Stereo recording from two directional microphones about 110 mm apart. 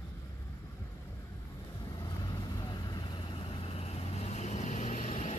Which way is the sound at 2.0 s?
40° left (ahead or behind).